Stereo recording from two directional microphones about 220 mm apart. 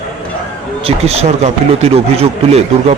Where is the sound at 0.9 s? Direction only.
25° right (ahead or behind).